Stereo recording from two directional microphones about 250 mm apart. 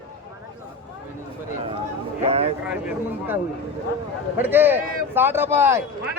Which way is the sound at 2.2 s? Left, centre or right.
Right.